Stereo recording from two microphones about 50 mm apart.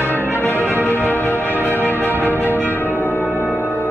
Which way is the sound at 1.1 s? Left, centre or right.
Left.